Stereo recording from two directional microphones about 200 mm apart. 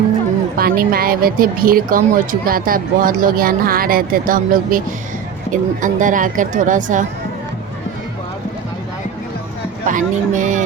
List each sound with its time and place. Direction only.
0.5 s speech: 45° right (ahead or behind)
9.8 s speech: 40° right (ahead or behind)